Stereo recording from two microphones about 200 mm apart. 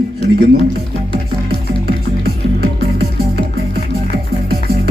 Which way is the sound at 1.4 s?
50° right (ahead or behind).